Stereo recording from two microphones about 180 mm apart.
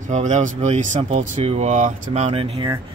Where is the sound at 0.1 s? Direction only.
40° right (ahead or behind).